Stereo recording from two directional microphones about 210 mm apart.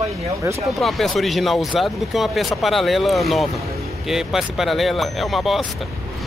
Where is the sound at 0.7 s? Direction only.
Centre (ahead or behind).